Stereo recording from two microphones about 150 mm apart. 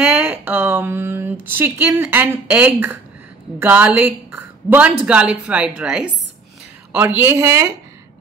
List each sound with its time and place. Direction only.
0.0 s speech: 10° right (ahead or behind)